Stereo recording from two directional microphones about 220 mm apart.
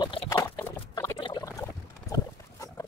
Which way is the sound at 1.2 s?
20° left (ahead or behind).